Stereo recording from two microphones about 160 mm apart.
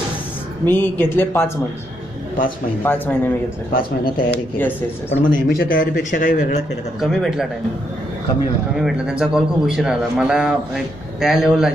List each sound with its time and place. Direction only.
0.7 s speech: 15° left (ahead or behind)
2.8 s speech: 10° left (ahead or behind)
3.7 s speech: 65° left (ahead or behind)
5.1 s speech: 55° left (ahead or behind)
7.0 s a man's voice: centre (ahead or behind)
8.7 s a man's voice: 5° right (ahead or behind)